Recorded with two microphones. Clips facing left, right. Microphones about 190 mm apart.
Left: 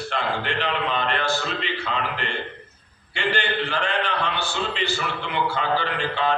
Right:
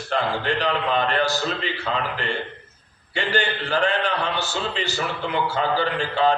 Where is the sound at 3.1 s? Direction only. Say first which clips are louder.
Right 1 dB; 40° right (ahead or behind).